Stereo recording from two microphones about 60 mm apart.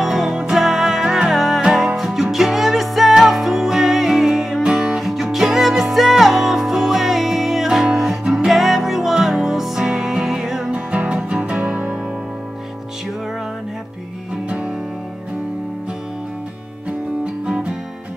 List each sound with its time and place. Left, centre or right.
0.0 s music: centre
10.7 s music: centre